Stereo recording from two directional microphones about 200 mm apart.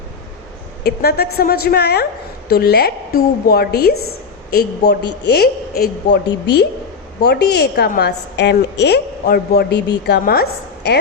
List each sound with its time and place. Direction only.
0.9 s a woman's voice: 50° left (ahead or behind)